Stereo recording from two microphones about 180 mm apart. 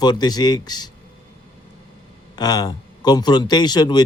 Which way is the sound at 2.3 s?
20° left (ahead or behind).